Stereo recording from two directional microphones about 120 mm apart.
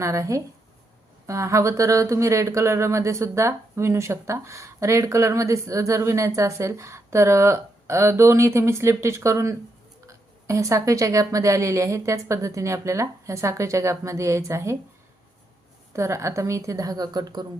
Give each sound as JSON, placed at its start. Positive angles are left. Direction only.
{"t": 0.0, "sound": "speech", "side_deg": -25}
{"t": 15.9, "sound": "speech", "side_deg": -25}